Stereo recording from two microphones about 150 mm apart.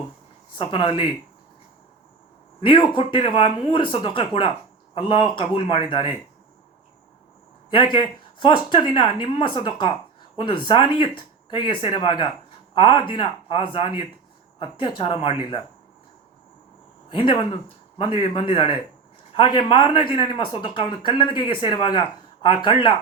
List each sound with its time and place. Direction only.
0.6 s speech: 35° left (ahead or behind)
2.6 s speech: 35° left (ahead or behind)
7.7 s speech: 30° left (ahead or behind)
17.1 s speech: 35° left (ahead or behind)